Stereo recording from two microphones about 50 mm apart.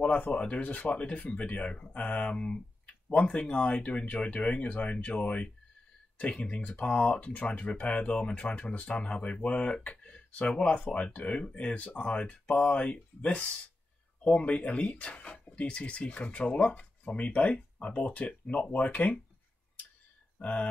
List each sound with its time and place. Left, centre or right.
0.0 s speech: left
20.3 s speech: left